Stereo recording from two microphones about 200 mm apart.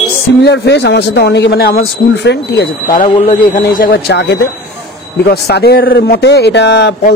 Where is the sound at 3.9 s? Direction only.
60° left (ahead or behind).